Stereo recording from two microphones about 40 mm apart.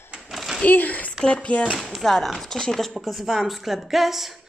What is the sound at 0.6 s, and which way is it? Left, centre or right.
Speech, left.